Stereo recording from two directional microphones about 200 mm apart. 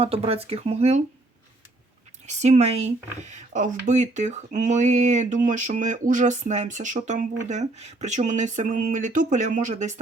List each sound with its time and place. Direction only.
0.0 s speech: 30° right (ahead or behind)
2.2 s speech: 35° right (ahead or behind)